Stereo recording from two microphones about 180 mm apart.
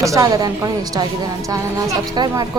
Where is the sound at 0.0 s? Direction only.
20° right (ahead or behind).